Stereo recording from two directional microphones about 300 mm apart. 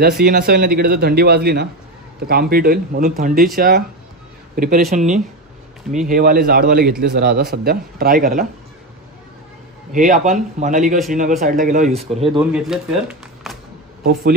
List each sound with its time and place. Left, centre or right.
0.0 s a man's voice: right
9.9 s speech: right
12.3 s speech: centre